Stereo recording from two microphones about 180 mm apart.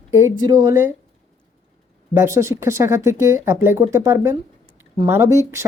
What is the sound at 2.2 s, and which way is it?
Speech, 15° right (ahead or behind).